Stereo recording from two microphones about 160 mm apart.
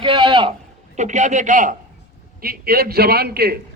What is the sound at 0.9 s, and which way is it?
Speech, 50° right (ahead or behind).